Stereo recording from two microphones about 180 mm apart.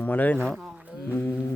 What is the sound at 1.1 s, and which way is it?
Speech, 10° left (ahead or behind).